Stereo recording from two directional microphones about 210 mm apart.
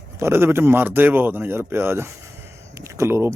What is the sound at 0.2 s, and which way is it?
Speech, 10° right (ahead or behind).